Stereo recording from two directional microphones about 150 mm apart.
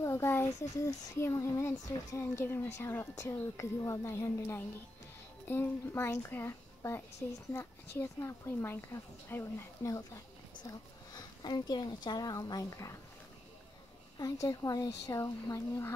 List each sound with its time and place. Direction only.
0.0 s a woman's voice: 20° left (ahead or behind)
8.0 s a woman's voice: 20° left (ahead or behind)
14.1 s a woman's voice: 25° left (ahead or behind)